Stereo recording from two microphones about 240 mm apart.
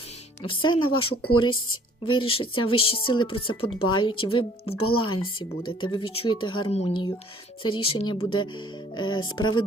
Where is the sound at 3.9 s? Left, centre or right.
Centre.